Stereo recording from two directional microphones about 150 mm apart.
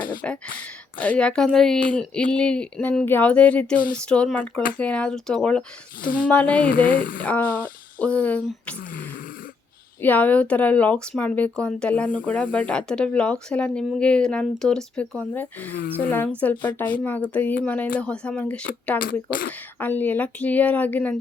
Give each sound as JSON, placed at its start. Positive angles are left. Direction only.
{"t": 0.2, "sound": "speech", "side_deg": 10}
{"t": 6.8, "sound": "speech", "side_deg": 65}
{"t": 7.2, "sound": "speech", "side_deg": 10}
{"t": 8.8, "sound": "a sound", "side_deg": 70}
{"t": 10.0, "sound": "speech", "side_deg": 10}